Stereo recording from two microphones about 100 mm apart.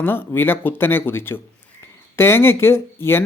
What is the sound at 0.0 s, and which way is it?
Speech, 20° left (ahead or behind).